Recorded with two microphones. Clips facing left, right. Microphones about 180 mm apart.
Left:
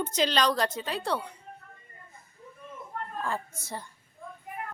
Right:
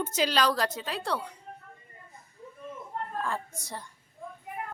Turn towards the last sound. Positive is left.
turn(degrees=0)  # may be behind; listen again after turning